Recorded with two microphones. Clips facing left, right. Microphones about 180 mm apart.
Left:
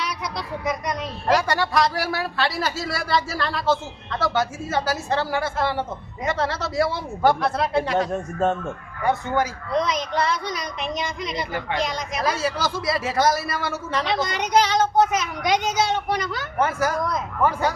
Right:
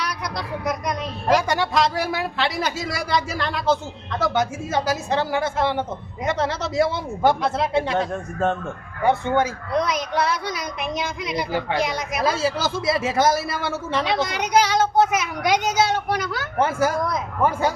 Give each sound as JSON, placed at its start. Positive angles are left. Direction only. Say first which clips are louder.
{"t": 0.0, "sound": "a sound", "louder": "right 1 dB", "side_deg": 0}
{"t": 1.5, "sound": "speech", "louder": "right 1 dB", "side_deg": -20}
{"t": 7.9, "sound": "speech", "louder": "left 1 dB", "side_deg": 0}
{"t": 9.0, "sound": "speech", "louder": "right 3 dB", "side_deg": -25}
{"t": 9.7, "sound": "speech", "louder": "even", "side_deg": -5}
{"t": 12.2, "sound": "speech", "louder": "right 2 dB", "side_deg": -25}
{"t": 14.0, "sound": "speech", "louder": "even", "side_deg": -5}
{"t": 16.6, "sound": "speech", "louder": "right 2 dB", "side_deg": -25}